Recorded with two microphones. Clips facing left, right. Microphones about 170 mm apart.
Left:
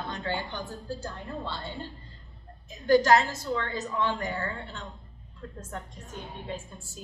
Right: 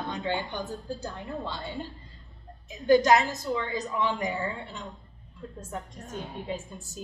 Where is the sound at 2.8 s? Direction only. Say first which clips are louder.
Right 1 dB; 15° right (ahead or behind).